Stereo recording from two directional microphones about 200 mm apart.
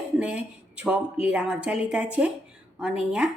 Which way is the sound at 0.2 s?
5° right (ahead or behind).